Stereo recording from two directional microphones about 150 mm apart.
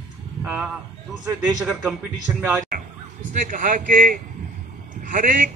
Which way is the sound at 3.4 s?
65° right (ahead or behind).